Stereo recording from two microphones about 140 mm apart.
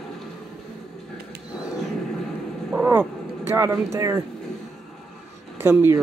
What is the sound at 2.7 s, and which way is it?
Speech, 10° right (ahead or behind).